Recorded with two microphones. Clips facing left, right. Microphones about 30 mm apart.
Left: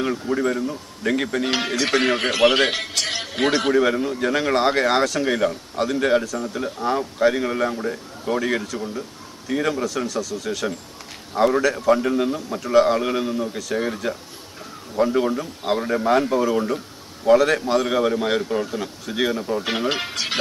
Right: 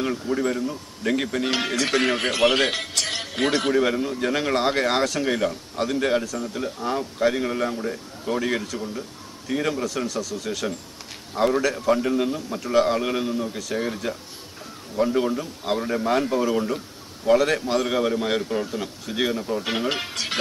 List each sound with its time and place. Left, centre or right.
0.0 s a man's voice: centre
2.7 s a man's voice: left
3.6 s a man's voice: centre
19.6 s speech: centre